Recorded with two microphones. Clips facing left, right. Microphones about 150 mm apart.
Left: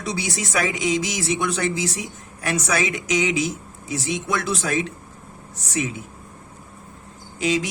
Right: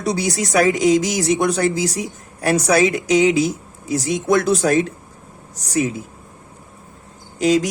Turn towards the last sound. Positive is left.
turn(degrees=-40)  # may be behind; listen again after turning